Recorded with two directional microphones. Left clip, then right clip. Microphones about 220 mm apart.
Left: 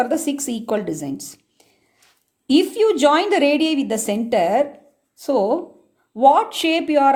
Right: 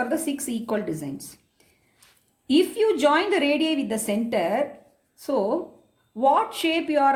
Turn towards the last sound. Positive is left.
turn(degrees=35)  # may be behind; listen again after turning